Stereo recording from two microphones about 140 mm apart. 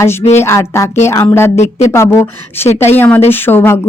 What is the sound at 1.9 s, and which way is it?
A woman's voice, 20° left (ahead or behind).